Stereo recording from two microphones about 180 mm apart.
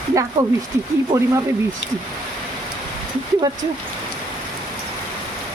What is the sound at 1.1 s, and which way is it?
Speech, 15° right (ahead or behind).